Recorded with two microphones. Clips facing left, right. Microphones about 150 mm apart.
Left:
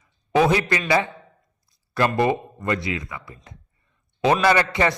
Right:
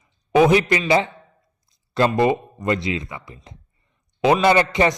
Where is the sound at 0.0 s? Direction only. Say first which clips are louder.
Right 3 dB; 20° right (ahead or behind).